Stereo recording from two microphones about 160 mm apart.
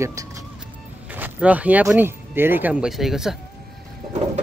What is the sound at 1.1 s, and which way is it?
Speech, 10° right (ahead or behind).